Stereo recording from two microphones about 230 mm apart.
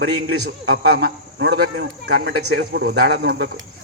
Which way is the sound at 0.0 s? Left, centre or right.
Right.